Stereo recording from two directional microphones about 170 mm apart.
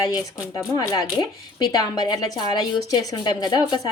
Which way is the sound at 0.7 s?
25° left (ahead or behind).